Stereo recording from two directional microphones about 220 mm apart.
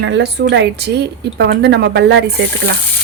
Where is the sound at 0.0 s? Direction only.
55° right (ahead or behind).